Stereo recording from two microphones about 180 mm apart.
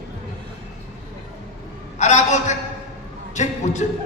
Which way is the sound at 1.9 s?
40° left (ahead or behind).